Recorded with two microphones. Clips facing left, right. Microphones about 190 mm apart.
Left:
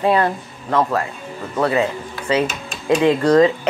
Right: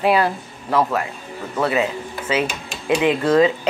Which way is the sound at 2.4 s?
25° left (ahead or behind).